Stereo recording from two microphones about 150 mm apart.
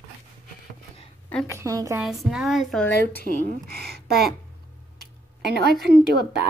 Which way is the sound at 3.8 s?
90° right.